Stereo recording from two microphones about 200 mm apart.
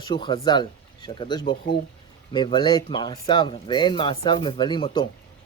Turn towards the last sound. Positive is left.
turn(degrees=20)  # may be behind; listen again after turning